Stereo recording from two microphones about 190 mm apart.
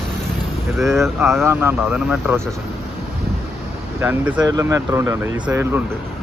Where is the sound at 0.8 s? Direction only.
Centre (ahead or behind).